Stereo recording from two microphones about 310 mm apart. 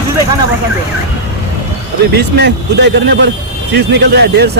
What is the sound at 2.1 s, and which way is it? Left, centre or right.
Speech, right.